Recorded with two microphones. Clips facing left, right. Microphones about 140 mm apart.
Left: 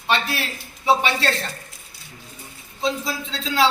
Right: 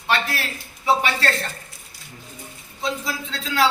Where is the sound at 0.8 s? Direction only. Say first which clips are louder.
Left 1 dB; 25° left (ahead or behind).